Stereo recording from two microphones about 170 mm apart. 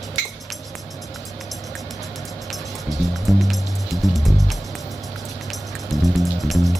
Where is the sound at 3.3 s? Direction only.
Centre (ahead or behind).